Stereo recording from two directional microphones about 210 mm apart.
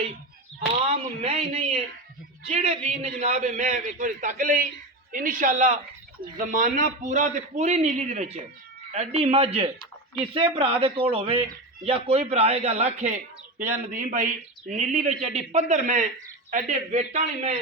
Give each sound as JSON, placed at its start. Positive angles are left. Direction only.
{"t": 1.2, "sound": "a man's voice", "side_deg": -30}